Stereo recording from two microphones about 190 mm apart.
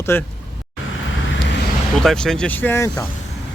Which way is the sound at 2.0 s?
5° left (ahead or behind).